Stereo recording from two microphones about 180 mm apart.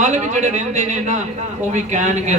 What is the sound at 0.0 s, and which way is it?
A man's voice, 40° right (ahead or behind).